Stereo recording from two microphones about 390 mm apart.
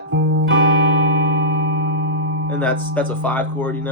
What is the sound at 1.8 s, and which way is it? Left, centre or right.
Music, right.